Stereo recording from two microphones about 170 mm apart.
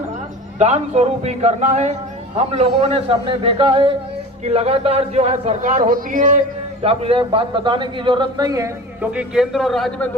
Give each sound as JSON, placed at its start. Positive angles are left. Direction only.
{"t": 0.6, "sound": "speech", "side_deg": -40}
{"t": 6.8, "sound": "a man's voice", "side_deg": -35}
{"t": 9.0, "sound": "a man's voice", "side_deg": -5}